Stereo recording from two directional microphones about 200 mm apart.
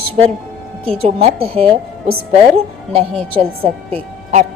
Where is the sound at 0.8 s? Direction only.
30° right (ahead or behind).